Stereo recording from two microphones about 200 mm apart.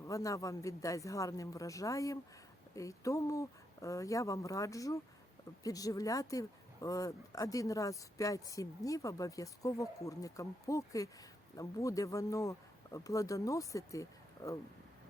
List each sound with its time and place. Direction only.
0.0 s speech: 15° left (ahead or behind)